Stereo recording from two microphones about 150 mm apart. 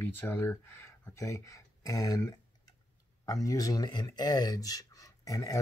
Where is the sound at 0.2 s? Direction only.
15° left (ahead or behind).